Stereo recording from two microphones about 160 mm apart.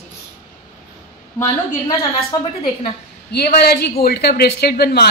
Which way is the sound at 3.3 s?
75° left (ahead or behind).